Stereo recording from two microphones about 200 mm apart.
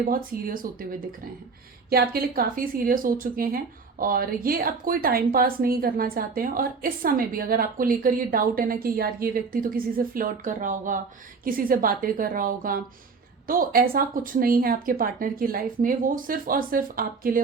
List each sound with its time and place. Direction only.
0.0 s speech: 45° right (ahead or behind)
1.9 s speech: 50° right (ahead or behind)